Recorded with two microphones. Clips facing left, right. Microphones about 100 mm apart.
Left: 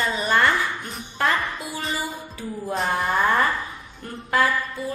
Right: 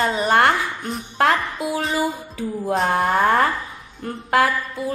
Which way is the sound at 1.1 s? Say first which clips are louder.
Right 5 dB; 75° right (ahead or behind).